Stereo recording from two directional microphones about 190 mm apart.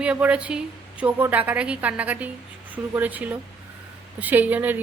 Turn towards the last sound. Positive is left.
turn(degrees=-10)  # may be behind; listen again after turning